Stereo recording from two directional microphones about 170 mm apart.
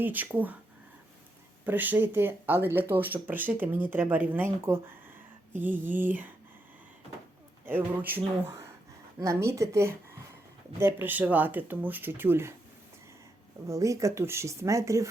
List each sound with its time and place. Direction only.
0.0 s speech: 10° right (ahead or behind)
1.6 s speech: 10° right (ahead or behind)
7.6 s speech: 10° right (ahead or behind)
13.7 s speech: 20° right (ahead or behind)